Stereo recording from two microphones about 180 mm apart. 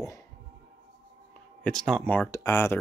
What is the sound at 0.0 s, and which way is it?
Music, 15° left (ahead or behind).